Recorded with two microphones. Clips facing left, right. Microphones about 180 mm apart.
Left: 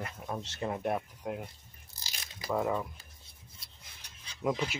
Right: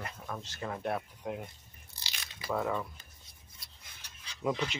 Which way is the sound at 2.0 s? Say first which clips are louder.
Left 1 dB; 40° left (ahead or behind).